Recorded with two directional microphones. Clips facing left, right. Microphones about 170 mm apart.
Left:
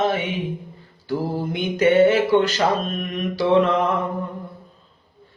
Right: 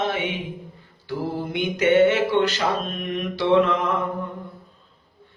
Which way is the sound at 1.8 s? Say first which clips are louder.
Left 2 dB; 35° left (ahead or behind).